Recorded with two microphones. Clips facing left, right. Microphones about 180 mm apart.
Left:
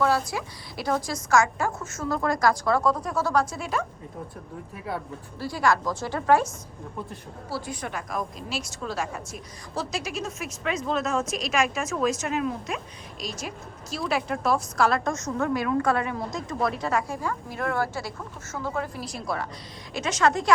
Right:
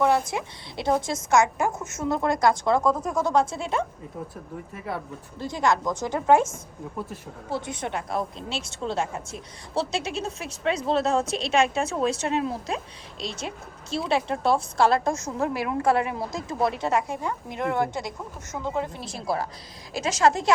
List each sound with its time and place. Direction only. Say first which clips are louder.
0.0 s a woman's voice: right 2 dB; 20° right (ahead or behind)
2.8 s a woman's voice: right 1 dB; 10° right (ahead or behind); by 3.8 s 25° right (ahead or behind)
4.9 s speech: even; centre (ahead or behind)
5.4 s a woman's voice: even; 20° right (ahead or behind)
7.5 s a woman's voice: right 3 dB; 20° right (ahead or behind)